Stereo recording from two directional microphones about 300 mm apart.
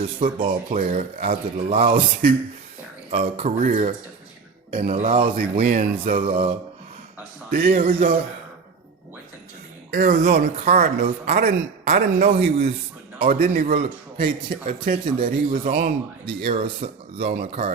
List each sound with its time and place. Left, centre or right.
0.0 s speech: centre
9.9 s speech: right